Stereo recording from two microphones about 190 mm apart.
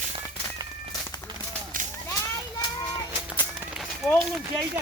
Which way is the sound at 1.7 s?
45° right (ahead or behind).